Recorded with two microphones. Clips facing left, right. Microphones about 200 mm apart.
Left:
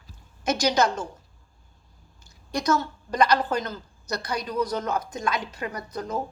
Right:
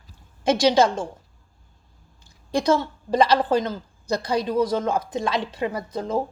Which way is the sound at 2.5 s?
30° right (ahead or behind).